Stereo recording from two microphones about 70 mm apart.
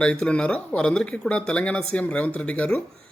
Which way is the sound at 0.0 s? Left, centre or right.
Centre.